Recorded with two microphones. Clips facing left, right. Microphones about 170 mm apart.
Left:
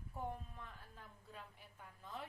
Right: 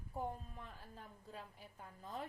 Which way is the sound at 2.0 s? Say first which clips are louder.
Right 3 dB; 40° right (ahead or behind).